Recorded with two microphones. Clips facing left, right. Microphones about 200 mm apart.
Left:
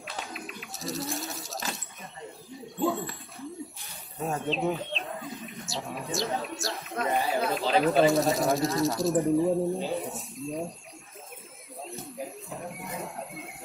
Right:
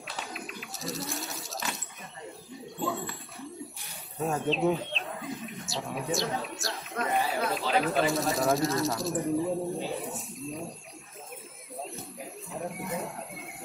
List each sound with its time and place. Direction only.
0.0 s bird: centre (ahead or behind)
4.3 s speech: centre (ahead or behind)
6.6 s a sound: centre (ahead or behind)
7.2 s chatter: centre (ahead or behind)
8.1 s speech: centre (ahead or behind)
11.8 s music: centre (ahead or behind)
12.6 s speech: centre (ahead or behind)